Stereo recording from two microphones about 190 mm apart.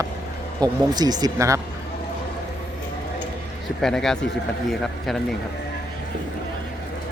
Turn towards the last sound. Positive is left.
turn(degrees=0)  # may be behind; listen again after turning